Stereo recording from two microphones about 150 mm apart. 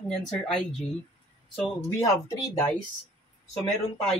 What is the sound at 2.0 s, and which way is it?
Speech, 20° left (ahead or behind).